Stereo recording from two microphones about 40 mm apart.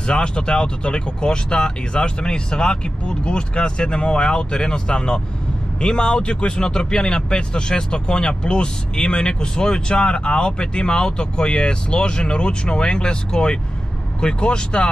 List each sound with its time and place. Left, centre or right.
0.0 s speech: left